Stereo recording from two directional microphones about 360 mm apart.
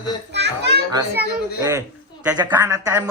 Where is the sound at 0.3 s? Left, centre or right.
Right.